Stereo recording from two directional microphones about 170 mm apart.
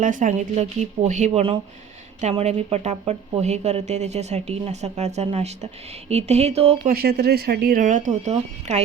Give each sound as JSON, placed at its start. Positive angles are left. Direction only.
{"t": 0.0, "sound": "speech", "side_deg": -50}
{"t": 6.8, "sound": "speech", "side_deg": -65}